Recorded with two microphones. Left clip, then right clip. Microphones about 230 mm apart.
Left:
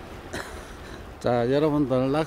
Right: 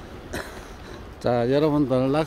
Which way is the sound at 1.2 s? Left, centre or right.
Centre.